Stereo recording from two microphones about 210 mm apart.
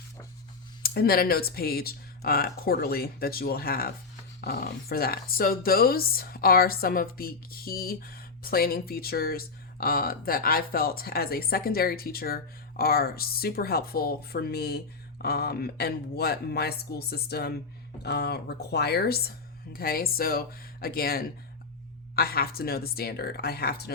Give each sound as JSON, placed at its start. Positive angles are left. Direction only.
{"t": 0.8, "sound": "speech", "side_deg": 45}